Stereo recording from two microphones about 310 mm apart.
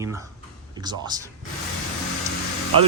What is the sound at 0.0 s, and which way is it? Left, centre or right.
Speech, centre.